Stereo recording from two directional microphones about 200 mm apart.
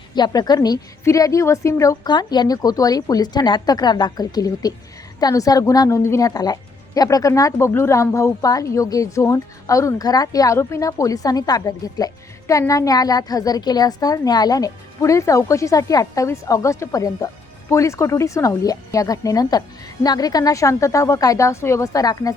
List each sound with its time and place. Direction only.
0.1 s a woman's voice: 20° left (ahead or behind)